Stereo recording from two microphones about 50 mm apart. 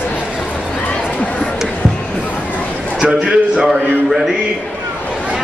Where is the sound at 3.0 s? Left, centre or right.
Centre.